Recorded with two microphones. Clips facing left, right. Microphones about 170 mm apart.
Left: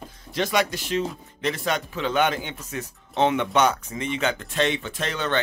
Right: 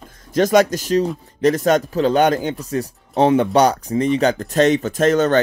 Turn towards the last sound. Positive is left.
turn(degrees=-45)  # may be behind; listen again after turning